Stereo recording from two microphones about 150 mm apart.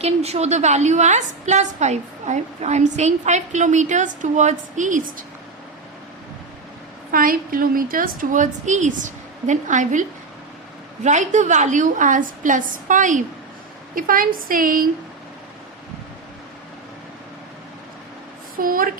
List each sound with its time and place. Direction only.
0.0 s a woman's voice: 45° right (ahead or behind)
7.1 s a woman's voice: 70° right (ahead or behind)
13.9 s a woman's voice: 70° right (ahead or behind)
18.6 s a woman's voice: 65° right (ahead or behind)